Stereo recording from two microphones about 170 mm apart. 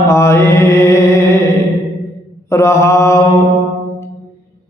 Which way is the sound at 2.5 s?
15° left (ahead or behind).